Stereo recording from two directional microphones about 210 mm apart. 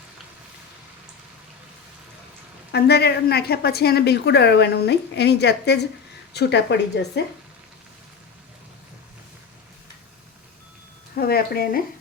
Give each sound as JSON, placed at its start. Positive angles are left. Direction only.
{"t": 2.7, "sound": "a woman's voice", "side_deg": 50}
{"t": 11.1, "sound": "speech", "side_deg": 45}